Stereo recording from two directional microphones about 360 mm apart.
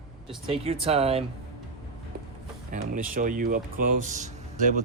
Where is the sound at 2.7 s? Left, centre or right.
Right.